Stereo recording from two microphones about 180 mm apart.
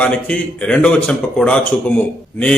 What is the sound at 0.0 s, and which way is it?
A man's voice, 5° left (ahead or behind).